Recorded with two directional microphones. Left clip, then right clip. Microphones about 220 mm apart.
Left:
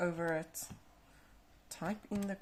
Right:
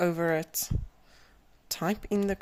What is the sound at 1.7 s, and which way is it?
Speech, 45° right (ahead or behind).